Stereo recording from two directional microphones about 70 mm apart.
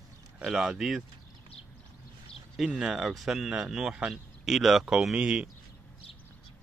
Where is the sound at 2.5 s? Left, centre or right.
Centre.